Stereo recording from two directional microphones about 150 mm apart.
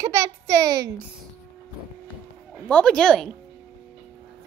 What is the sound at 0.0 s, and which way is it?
Speech, 20° right (ahead or behind).